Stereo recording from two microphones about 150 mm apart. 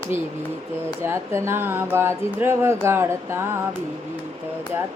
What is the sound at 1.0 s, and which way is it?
Speech, 15° right (ahead or behind).